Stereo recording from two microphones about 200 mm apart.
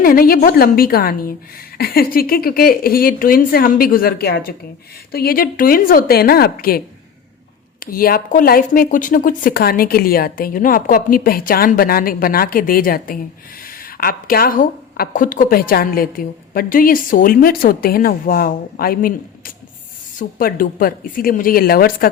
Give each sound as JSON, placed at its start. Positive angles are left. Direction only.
{"t": 0.0, "sound": "a woman's voice", "side_deg": 45}
{"t": 7.9, "sound": "a woman's voice", "side_deg": 45}